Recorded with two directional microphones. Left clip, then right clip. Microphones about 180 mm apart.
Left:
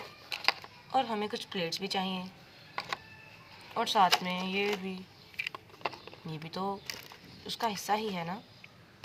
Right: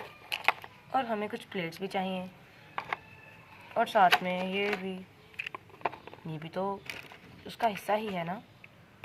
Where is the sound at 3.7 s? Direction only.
20° right (ahead or behind).